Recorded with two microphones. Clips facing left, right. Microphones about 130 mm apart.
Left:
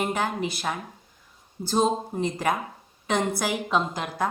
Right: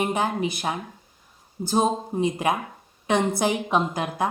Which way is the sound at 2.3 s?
25° right (ahead or behind).